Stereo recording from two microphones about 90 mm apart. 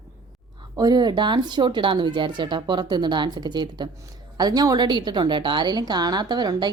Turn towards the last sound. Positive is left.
turn(degrees=-50)  # may be behind; listen again after turning